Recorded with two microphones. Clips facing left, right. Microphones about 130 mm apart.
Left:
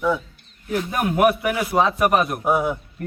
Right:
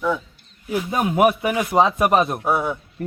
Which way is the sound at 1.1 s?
10° right (ahead or behind).